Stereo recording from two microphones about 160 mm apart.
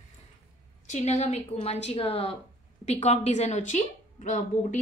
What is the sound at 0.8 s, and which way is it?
A woman's voice, 45° left (ahead or behind).